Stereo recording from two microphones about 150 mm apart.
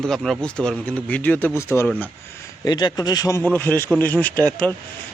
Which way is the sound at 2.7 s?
25° left (ahead or behind).